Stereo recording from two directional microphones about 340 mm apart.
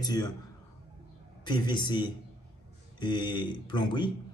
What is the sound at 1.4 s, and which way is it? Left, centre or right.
A man's voice, centre.